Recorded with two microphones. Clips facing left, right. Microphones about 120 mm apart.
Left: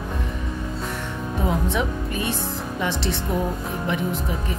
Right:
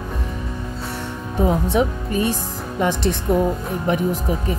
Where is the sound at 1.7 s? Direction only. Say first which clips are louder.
Right 5 dB; 35° right (ahead or behind).